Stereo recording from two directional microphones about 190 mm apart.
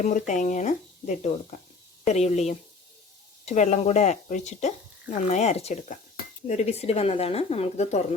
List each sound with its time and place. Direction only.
0.0 s speech: 40° left (ahead or behind)